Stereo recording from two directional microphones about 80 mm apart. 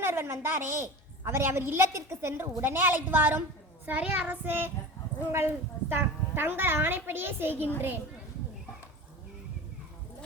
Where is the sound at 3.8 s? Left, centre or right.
Centre.